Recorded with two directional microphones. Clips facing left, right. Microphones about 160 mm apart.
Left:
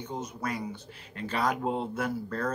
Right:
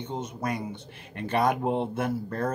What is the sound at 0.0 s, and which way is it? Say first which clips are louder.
Speech: right 3 dB; 25° right (ahead or behind).